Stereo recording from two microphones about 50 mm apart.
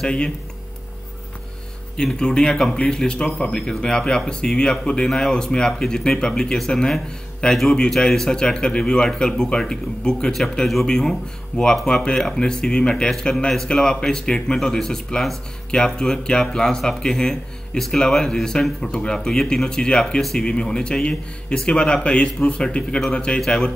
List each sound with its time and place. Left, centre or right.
0.0 s speech: centre
2.1 s speech: centre
23.4 s speech: centre